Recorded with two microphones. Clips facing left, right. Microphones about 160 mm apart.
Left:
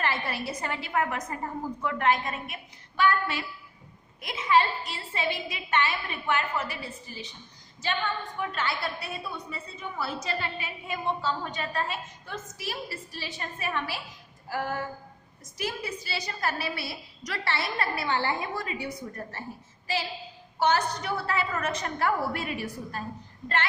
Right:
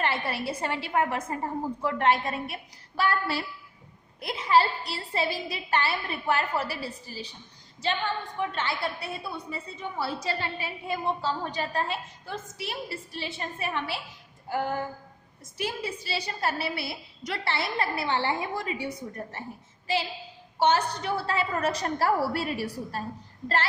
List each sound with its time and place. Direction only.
0.0 s a woman's voice: 25° right (ahead or behind)
14.4 s a sound: 25° right (ahead or behind)
15.5 s a woman's voice: 30° right (ahead or behind)
20.6 s a woman's voice: 30° right (ahead or behind)